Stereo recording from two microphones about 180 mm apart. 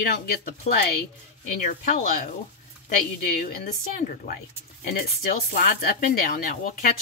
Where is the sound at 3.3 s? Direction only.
55° left (ahead or behind).